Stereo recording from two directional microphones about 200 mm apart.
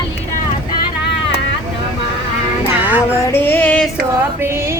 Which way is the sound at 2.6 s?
10° right (ahead or behind).